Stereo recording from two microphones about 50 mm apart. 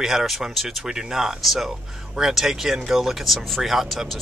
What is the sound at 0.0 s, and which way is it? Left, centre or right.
Speech, centre.